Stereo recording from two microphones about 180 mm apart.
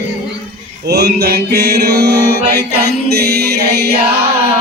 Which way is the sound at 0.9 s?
65° right (ahead or behind).